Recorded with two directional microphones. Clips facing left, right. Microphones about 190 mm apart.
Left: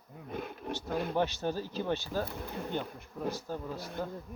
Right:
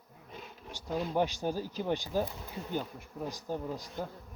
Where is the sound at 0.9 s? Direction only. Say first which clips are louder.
Even; 60° left (ahead or behind).